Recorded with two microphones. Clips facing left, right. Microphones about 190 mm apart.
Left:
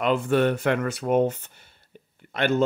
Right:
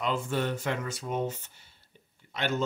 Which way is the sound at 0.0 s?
65° left (ahead or behind).